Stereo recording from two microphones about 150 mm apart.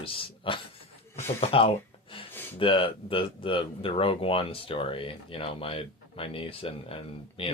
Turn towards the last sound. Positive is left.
turn(degrees=40)  # may be behind; listen again after turning